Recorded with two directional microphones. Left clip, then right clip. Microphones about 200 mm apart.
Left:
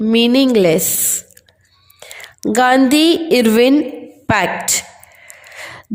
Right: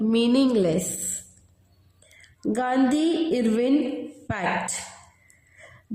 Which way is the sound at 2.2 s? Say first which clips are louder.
Left 13 dB; 45° left (ahead or behind).